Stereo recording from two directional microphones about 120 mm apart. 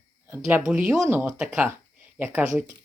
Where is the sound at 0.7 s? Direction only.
15° right (ahead or behind).